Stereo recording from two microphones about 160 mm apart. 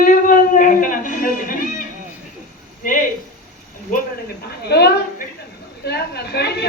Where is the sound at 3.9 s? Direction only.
80° left.